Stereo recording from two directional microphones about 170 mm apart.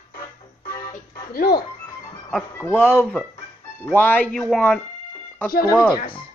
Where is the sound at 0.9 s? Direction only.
60° left (ahead or behind).